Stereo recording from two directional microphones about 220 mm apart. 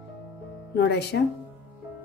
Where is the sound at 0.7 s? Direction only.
50° left (ahead or behind).